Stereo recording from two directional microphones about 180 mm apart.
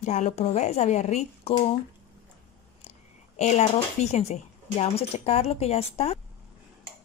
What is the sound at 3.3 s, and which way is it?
Speech, 40° left (ahead or behind).